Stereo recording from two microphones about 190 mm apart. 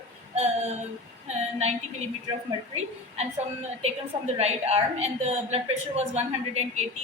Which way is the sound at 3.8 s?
35° right (ahead or behind).